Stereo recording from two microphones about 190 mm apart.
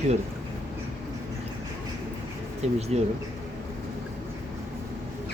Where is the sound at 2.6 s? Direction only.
35° right (ahead or behind).